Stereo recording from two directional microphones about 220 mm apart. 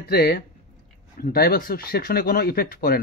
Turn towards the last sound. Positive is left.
turn(degrees=40)  # may be behind; listen again after turning